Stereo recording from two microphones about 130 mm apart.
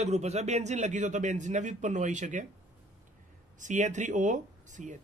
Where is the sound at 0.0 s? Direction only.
55° right (ahead or behind); by 2.4 s 70° right (ahead or behind).